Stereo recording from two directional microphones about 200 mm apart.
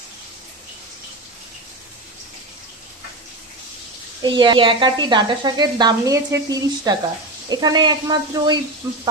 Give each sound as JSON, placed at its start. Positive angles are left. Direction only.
{"t": 4.2, "sound": "speech", "side_deg": -20}